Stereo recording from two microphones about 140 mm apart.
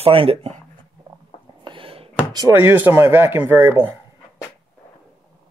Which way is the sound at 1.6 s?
35° right (ahead or behind).